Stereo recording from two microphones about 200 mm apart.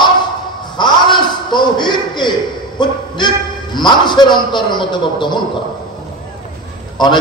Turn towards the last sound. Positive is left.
turn(degrees=20)  # may be behind; listen again after turning